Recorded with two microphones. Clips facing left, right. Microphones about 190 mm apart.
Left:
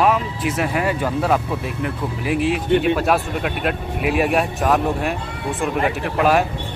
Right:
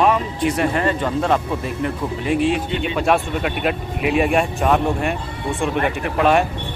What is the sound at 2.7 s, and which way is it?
Speech, 55° left (ahead or behind).